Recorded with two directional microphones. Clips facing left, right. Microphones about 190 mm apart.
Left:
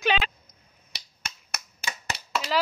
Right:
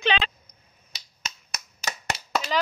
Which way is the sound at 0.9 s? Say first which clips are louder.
Right 1 dB; 60° left (ahead or behind).